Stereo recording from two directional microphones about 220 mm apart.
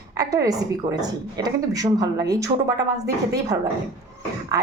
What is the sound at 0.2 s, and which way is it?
A woman's voice, 15° right (ahead or behind).